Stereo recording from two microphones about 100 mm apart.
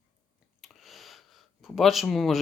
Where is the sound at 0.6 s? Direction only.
Centre (ahead or behind).